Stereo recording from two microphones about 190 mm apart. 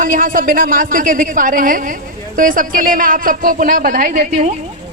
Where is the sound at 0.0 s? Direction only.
45° right (ahead or behind).